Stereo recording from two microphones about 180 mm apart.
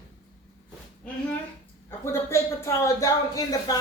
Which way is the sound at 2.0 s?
15° left (ahead or behind).